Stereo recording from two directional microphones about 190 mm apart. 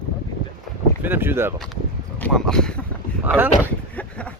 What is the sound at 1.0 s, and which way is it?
Speech, 10° right (ahead or behind).